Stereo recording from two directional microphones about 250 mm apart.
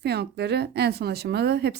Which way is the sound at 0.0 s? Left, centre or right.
Right.